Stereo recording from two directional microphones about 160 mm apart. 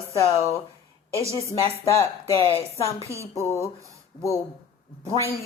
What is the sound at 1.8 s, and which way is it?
Speech, 20° left (ahead or behind).